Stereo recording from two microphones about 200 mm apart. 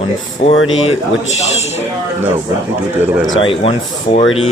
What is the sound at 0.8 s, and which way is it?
Speech, 30° left (ahead or behind).